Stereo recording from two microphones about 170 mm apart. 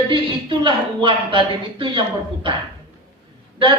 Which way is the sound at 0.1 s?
30° right (ahead or behind).